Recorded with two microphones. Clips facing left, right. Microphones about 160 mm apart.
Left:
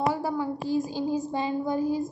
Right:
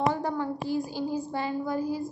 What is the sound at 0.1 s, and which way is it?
A woman's voice, 10° left (ahead or behind).